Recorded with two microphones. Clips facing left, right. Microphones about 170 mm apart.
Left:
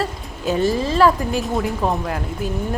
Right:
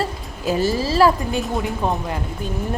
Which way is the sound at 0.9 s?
35° right (ahead or behind).